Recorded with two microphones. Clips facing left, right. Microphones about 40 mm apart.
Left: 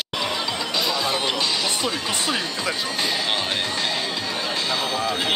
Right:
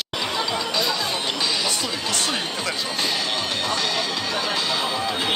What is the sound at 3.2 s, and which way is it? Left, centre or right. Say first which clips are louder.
Music: left 1 dB; left.